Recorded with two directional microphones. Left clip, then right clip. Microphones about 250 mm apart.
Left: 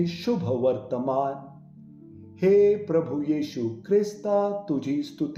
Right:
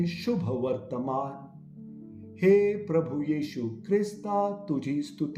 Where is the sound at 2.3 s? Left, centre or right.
Right.